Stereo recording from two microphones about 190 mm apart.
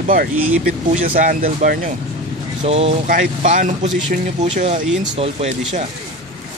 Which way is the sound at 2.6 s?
35° right (ahead or behind).